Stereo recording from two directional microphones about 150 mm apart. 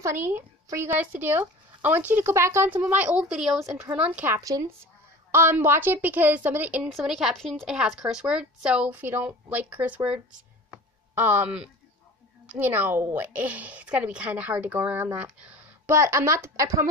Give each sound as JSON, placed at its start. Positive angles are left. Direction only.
{"t": 0.0, "sound": "speech", "side_deg": -15}
{"t": 4.4, "sound": "speech", "side_deg": -25}
{"t": 16.0, "sound": "speech", "side_deg": -20}